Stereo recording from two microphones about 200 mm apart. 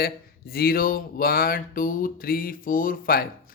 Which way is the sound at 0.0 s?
50° left (ahead or behind).